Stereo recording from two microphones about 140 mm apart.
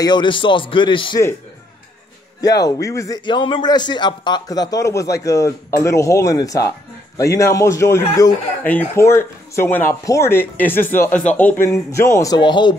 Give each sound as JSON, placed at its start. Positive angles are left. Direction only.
{"t": 0.0, "sound": "speech", "side_deg": 35}
{"t": 2.4, "sound": "a man's voice", "side_deg": 25}
{"t": 3.3, "sound": "a man's voice", "side_deg": 35}
{"t": 12.4, "sound": "speech", "side_deg": 35}